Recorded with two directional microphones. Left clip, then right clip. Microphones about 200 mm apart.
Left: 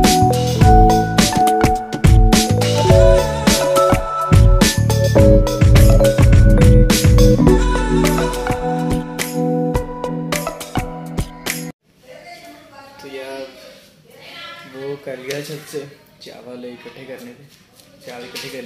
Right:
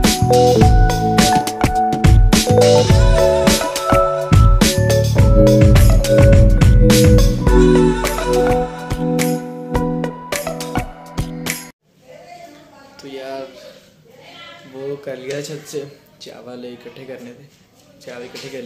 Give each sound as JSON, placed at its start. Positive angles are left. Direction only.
{"t": 0.0, "sound": "music", "side_deg": 0}
{"t": 15.7, "sound": "music", "side_deg": -5}